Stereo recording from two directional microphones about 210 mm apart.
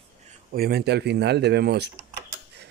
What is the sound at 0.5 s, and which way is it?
Speech, 50° right (ahead or behind).